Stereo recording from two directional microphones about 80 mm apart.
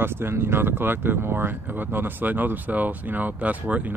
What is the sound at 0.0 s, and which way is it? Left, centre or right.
Speech, right.